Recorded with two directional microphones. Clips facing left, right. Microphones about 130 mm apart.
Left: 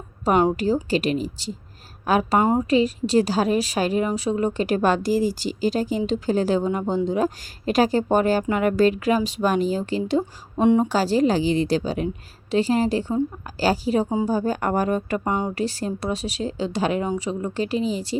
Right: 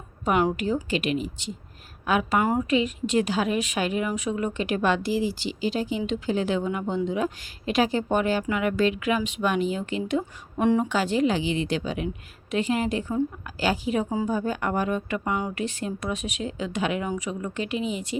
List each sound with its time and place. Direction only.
0.5 s a woman's voice: 35° left (ahead or behind)